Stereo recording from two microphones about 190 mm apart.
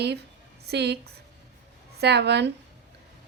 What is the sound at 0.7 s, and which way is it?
Speech, 60° right (ahead or behind).